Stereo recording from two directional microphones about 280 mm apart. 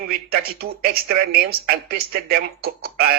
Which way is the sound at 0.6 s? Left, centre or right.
Right.